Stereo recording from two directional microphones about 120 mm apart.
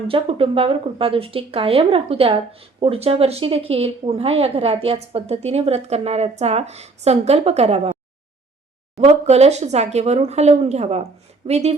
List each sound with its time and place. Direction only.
0.1 s speech: 50° right (ahead or behind)
9.0 s speech: 60° right (ahead or behind)